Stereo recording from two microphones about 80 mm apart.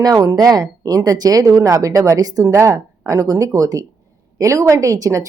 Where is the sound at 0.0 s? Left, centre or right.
Right.